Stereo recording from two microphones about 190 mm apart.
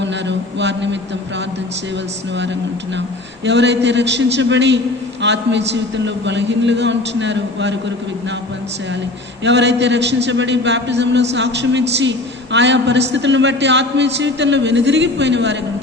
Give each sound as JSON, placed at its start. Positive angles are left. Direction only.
{"t": 0.0, "sound": "a man's voice", "side_deg": -70}
{"t": 3.4, "sound": "a man's voice", "side_deg": -65}
{"t": 9.4, "sound": "a man's voice", "side_deg": -70}